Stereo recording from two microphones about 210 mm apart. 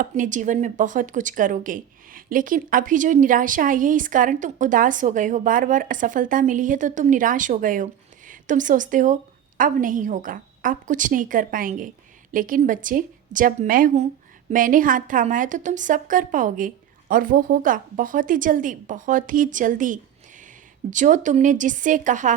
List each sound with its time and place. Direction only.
0.0 s speech: 40° right (ahead or behind)